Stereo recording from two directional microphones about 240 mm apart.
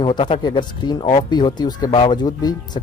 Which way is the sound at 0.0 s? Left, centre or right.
Centre.